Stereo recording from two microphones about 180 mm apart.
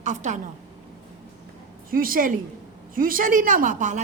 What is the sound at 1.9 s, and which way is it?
A woman's voice, 50° right (ahead or behind).